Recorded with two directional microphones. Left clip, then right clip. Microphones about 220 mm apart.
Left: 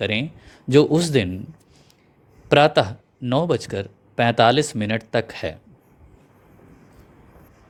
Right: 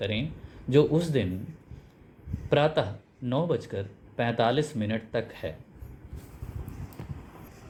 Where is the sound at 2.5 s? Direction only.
50° left (ahead or behind).